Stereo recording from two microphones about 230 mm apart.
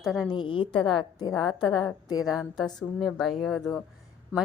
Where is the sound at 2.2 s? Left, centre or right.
Centre.